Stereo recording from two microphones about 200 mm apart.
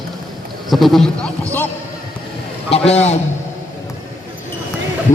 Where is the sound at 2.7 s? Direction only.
30° left (ahead or behind).